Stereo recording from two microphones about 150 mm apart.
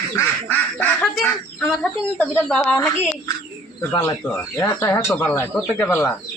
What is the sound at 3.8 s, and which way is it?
Speech, 20° left (ahead or behind).